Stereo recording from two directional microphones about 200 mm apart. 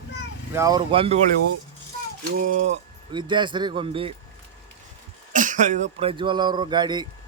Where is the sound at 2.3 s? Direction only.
45° right (ahead or behind).